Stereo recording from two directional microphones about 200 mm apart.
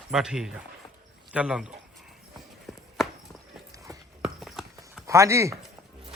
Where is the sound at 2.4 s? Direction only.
Centre (ahead or behind).